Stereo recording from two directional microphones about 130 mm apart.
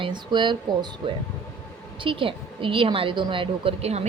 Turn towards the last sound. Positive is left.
turn(degrees=-50)  # may be behind; listen again after turning